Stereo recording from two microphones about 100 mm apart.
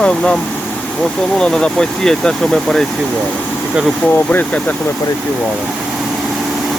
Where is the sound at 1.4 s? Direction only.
10° left (ahead or behind).